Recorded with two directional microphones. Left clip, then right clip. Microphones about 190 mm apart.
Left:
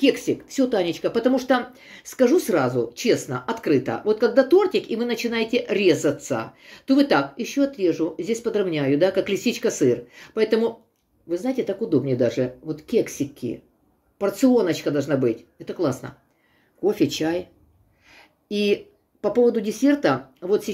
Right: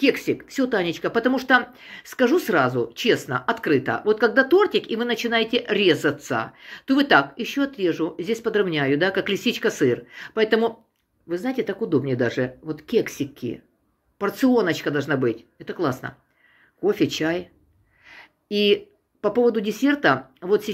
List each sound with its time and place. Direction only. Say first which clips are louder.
0.0 s speech: even; 5° right (ahead or behind)
18.0 s a sound: right 1 dB; centre (ahead or behind)
19.2 s speech: left 1 dB; centre (ahead or behind)